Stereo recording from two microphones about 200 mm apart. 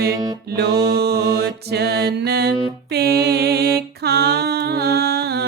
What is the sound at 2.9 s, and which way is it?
Mantra, 55° right (ahead or behind).